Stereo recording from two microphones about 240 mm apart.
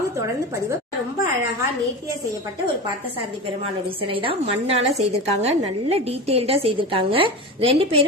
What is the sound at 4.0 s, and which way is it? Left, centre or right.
A woman's voice, right.